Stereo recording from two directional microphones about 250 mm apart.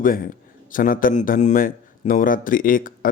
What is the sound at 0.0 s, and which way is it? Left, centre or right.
A man's voice, left.